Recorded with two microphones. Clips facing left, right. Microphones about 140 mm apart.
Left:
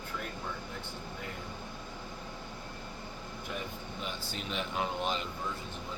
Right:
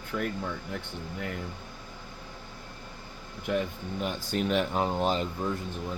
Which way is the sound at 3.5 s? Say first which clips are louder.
Right 12 dB; 60° right (ahead or behind).